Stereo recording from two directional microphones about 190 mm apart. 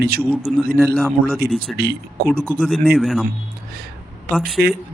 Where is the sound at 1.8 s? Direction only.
55° right (ahead or behind).